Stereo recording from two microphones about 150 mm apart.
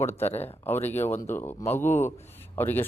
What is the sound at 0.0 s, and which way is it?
Speech, 15° left (ahead or behind).